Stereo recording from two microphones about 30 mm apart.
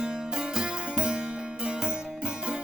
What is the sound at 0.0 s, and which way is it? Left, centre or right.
Music, right.